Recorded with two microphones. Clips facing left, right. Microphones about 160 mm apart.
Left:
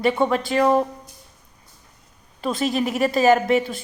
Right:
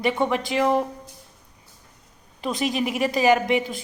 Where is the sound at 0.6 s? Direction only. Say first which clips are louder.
Left 3 dB; 25° left (ahead or behind).